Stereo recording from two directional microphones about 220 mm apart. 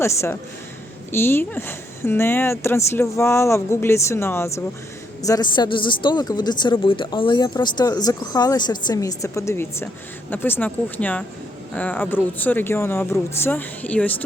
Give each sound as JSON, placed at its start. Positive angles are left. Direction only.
{"t": 0.0, "sound": "a woman's voice", "side_deg": 10}